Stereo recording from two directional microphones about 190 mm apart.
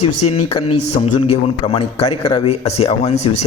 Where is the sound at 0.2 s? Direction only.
35° left (ahead or behind).